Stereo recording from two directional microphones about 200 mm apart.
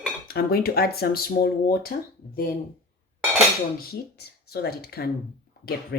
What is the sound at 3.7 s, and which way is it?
Speech, 50° left (ahead or behind).